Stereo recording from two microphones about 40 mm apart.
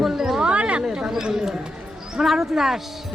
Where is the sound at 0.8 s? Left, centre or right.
Centre.